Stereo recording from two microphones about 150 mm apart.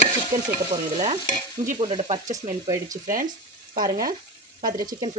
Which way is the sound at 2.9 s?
65° right (ahead or behind).